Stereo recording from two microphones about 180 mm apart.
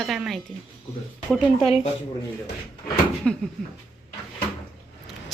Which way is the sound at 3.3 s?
5° left (ahead or behind).